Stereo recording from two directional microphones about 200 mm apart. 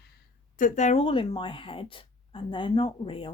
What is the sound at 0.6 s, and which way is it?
Speech, 40° left (ahead or behind).